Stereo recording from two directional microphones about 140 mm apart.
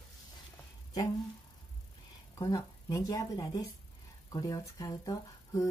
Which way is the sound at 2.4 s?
25° left (ahead or behind).